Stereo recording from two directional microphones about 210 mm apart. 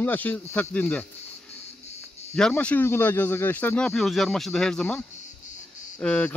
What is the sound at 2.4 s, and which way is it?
Speech, 5° left (ahead or behind).